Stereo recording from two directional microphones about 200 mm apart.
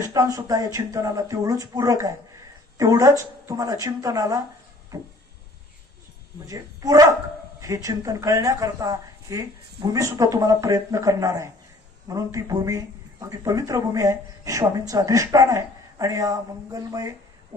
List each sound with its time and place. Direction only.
0.0 s speech: 15° right (ahead or behind)
6.4 s speech: 15° right (ahead or behind)